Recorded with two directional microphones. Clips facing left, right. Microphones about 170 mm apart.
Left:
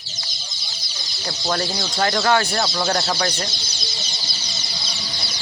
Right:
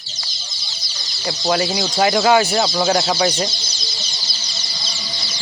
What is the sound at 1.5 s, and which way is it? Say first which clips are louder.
Speech: right 5 dB; 10° right (ahead or behind).